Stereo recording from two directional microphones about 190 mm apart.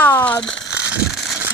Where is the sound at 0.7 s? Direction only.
5° right (ahead or behind).